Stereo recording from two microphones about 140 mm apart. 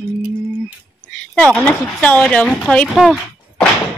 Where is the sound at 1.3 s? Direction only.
10° left (ahead or behind).